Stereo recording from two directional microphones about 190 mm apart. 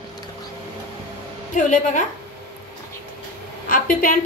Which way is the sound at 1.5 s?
40° left (ahead or behind).